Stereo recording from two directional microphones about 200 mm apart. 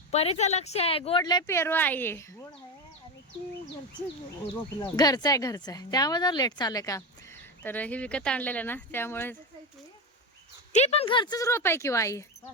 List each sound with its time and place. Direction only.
0.1 s speech: 30° left (ahead or behind); by 2.6 s 10° left (ahead or behind)
4.8 s speech: 20° left (ahead or behind)
10.7 s speech: 35° left (ahead or behind); by 12.2 s 15° left (ahead or behind)